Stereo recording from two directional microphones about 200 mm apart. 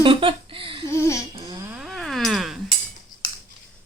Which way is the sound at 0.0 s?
25° right (ahead or behind).